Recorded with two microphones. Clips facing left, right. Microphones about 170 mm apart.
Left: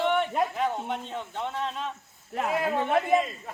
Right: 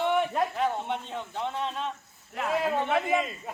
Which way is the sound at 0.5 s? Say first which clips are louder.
Even; 5° left (ahead or behind).